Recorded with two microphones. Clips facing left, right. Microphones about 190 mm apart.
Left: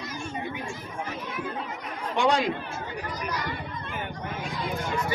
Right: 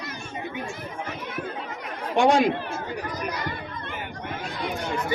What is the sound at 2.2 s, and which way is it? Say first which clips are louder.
Speech: right 5 dB; 50° right (ahead or behind).